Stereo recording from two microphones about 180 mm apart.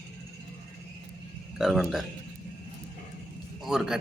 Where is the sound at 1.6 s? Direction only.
Centre (ahead or behind).